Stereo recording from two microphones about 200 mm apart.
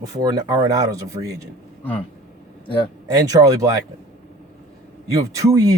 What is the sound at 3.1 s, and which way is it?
Speech, 15° right (ahead or behind).